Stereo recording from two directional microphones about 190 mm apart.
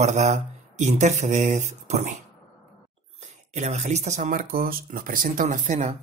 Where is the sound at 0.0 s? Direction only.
35° right (ahead or behind).